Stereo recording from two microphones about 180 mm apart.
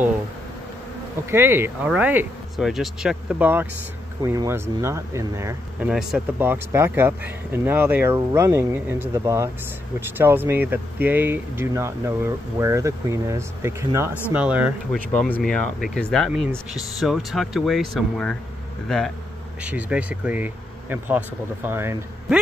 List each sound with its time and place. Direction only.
1.3 s speech: 15° right (ahead or behind)
5.9 s speech: 5° right (ahead or behind)
15.3 s speech: 5° left (ahead or behind); by 22.4 s 10° right (ahead or behind)